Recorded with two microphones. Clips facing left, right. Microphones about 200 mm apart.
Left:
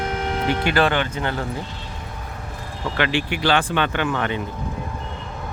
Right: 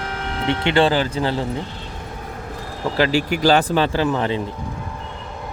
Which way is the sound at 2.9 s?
35° right (ahead or behind).